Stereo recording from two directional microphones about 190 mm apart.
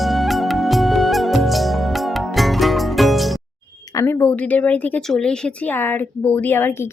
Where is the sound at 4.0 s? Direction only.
10° left (ahead or behind).